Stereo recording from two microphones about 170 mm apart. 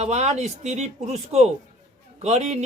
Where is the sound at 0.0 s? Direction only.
40° right (ahead or behind).